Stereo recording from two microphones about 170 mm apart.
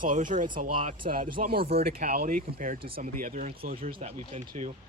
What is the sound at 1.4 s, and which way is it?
Speech, 65° right (ahead or behind).